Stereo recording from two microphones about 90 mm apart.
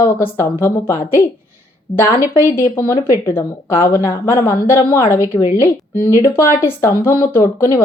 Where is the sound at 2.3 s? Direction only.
30° left (ahead or behind).